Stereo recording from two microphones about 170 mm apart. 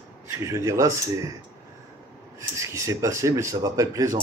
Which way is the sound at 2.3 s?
15° right (ahead or behind).